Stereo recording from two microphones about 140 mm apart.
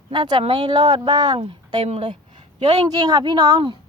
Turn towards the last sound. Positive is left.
turn(degrees=-30)  # may be behind; listen again after turning